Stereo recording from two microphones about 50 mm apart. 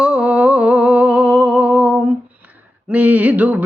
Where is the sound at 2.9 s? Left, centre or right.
Right.